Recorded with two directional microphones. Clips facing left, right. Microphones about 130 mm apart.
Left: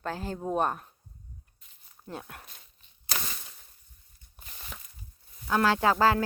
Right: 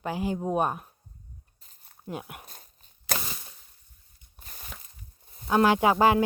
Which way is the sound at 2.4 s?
40° right (ahead or behind).